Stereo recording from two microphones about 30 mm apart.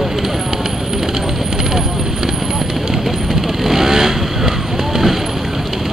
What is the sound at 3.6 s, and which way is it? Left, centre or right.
Vehicle, centre.